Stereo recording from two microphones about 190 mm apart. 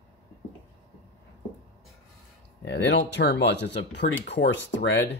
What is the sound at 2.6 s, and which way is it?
Speech, 65° left (ahead or behind).